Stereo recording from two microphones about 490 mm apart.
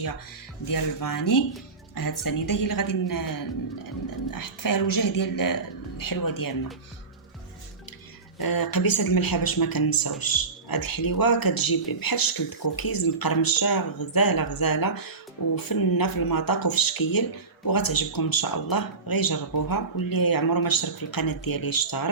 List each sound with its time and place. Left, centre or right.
0.7 s a woman's voice: left
8.4 s speech: left